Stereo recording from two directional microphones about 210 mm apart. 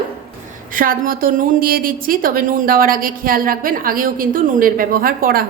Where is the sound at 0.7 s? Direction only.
40° right (ahead or behind).